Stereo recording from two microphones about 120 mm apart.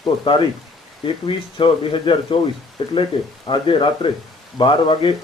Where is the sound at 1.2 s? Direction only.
45° left (ahead or behind).